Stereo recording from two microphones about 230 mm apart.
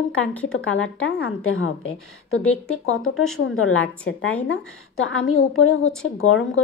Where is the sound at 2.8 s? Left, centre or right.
Left.